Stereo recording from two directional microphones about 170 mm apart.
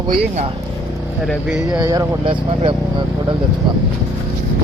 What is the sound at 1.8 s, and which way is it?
Speech, 25° right (ahead or behind).